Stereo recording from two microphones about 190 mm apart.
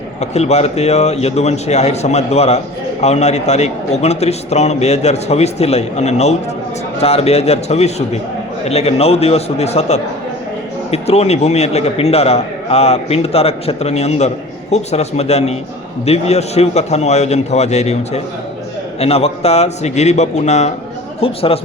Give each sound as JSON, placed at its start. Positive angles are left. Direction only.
{"t": 0.2, "sound": "a man's voice", "side_deg": 35}